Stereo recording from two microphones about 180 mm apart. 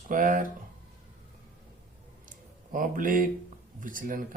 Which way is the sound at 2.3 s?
50° right (ahead or behind).